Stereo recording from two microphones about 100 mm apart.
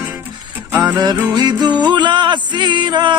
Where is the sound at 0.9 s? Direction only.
45° right (ahead or behind).